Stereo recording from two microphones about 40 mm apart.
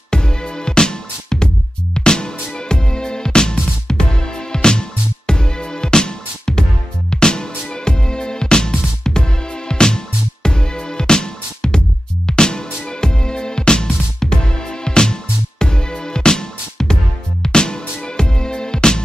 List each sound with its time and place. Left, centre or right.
0.1 s music: centre